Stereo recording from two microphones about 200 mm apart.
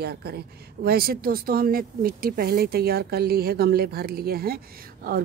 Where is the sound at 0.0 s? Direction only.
50° right (ahead or behind).